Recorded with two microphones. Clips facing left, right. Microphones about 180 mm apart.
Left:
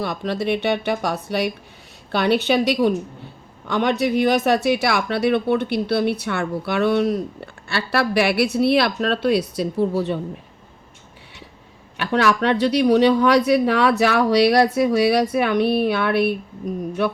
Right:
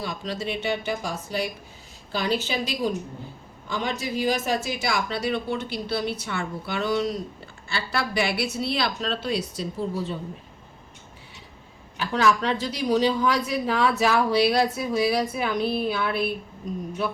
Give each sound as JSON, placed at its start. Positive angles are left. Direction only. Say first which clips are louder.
{"t": 0.0, "sound": "speech", "louder": "left 7 dB", "side_deg": 65}
{"t": 11.9, "sound": "speech", "louder": "left 4 dB", "side_deg": 70}